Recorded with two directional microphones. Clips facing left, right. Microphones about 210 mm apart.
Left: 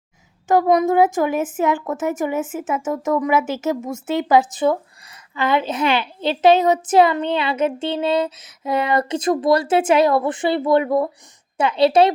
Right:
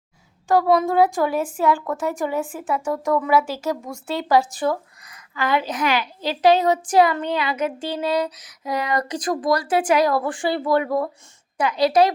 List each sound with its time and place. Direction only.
0.4 s a woman's voice: 20° left (ahead or behind)